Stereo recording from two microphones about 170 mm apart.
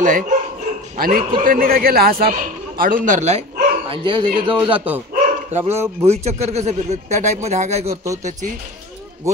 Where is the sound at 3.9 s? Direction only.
25° right (ahead or behind).